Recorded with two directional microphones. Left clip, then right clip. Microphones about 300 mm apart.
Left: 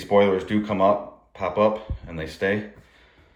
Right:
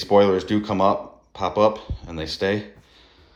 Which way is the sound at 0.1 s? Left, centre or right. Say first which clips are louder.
Right 2 dB; centre.